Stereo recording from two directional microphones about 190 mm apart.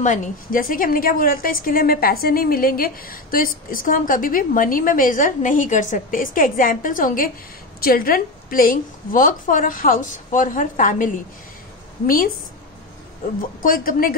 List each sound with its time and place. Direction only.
0.0 s a woman's voice: 45° left (ahead or behind)
13.6 s a woman's voice: 50° left (ahead or behind)